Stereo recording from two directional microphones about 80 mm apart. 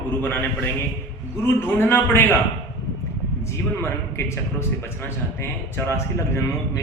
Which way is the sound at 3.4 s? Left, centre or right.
Left.